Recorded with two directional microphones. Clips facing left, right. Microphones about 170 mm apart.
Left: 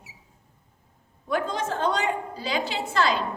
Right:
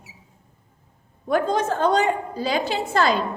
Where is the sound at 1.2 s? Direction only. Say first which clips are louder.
Right 6 dB; 45° right (ahead or behind).